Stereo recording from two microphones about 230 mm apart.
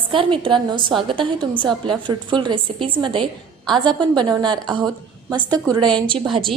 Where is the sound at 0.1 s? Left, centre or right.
Right.